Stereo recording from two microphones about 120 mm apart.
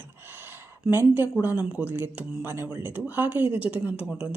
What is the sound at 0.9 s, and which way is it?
Speech, 20° right (ahead or behind).